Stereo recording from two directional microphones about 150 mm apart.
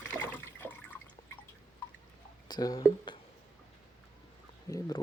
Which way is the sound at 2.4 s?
25° left (ahead or behind).